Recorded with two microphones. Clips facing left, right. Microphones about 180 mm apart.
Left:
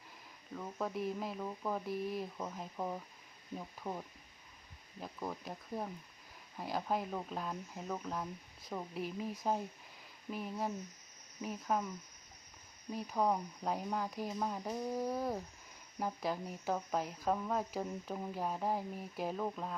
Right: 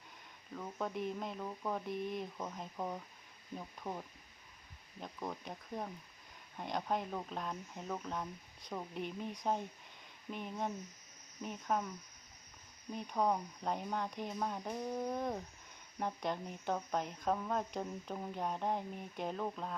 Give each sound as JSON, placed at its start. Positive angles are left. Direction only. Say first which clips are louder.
{"t": 0.5, "sound": "speech", "louder": "left 1 dB", "side_deg": 0}
{"t": 12.9, "sound": "speech", "louder": "left 1 dB", "side_deg": 5}